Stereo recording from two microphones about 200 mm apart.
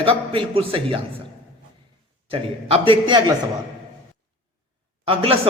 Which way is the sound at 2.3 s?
30° right (ahead or behind).